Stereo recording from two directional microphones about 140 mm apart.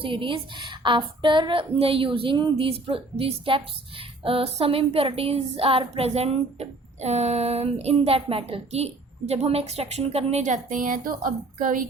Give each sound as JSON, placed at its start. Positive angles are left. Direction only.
{"t": 0.0, "sound": "speech", "side_deg": -40}